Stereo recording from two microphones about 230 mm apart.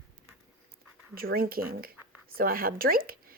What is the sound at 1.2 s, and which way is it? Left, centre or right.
Speech, right.